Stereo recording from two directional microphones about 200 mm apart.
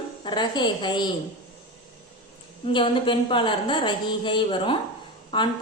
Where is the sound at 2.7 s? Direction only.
25° left (ahead or behind).